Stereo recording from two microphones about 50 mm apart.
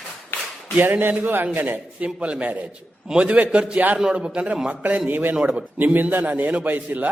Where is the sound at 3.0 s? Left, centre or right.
Centre.